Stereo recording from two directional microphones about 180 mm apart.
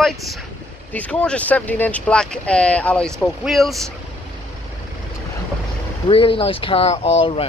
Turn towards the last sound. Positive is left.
turn(degrees=30)  # may be behind; listen again after turning